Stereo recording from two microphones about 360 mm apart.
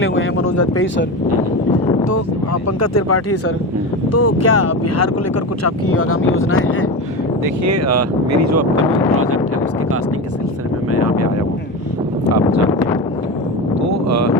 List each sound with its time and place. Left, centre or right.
0.0 s a sound: left
0.4 s speech: left
2.8 s speech: left
7.4 s speech: right
14.1 s speech: right